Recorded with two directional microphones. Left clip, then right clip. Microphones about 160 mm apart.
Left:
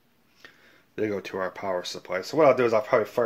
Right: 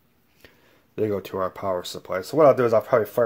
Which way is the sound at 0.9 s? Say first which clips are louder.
Right 3 dB; 20° right (ahead or behind).